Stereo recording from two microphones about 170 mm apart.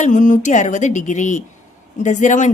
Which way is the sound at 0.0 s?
45° left (ahead or behind).